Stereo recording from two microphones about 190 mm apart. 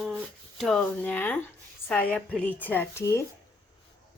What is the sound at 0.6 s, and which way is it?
A woman's voice, centre (ahead or behind).